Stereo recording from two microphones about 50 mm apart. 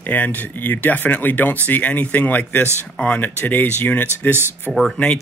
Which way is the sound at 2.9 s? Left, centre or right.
Left.